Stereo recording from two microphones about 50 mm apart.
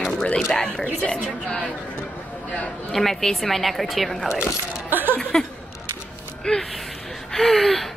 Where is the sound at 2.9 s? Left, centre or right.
Centre.